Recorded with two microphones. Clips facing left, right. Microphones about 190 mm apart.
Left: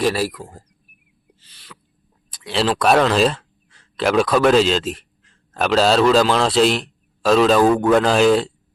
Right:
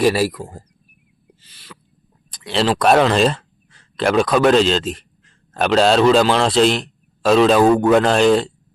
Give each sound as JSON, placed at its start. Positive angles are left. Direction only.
{"t": 0.0, "sound": "speech", "side_deg": -5}
{"t": 1.4, "sound": "owl", "side_deg": 0}
{"t": 2.3, "sound": "speech", "side_deg": 0}